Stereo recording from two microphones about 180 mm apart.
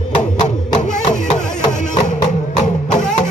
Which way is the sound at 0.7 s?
40° left (ahead or behind).